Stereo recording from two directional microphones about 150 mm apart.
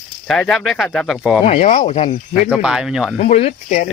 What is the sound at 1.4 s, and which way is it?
Speech, 45° left (ahead or behind).